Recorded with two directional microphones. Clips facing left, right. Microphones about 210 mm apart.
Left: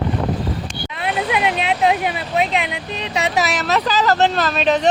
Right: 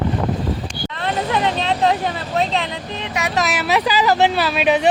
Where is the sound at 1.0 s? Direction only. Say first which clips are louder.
Even; 10° left (ahead or behind).